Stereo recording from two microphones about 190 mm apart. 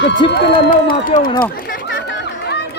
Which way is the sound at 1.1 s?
45° left (ahead or behind).